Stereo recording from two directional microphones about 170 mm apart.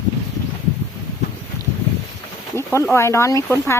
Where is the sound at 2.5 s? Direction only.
15° left (ahead or behind).